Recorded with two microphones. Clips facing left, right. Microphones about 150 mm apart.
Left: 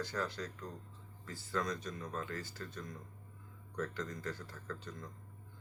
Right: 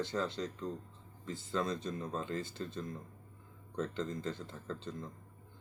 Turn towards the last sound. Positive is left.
turn(degrees=-25)  # may be behind; listen again after turning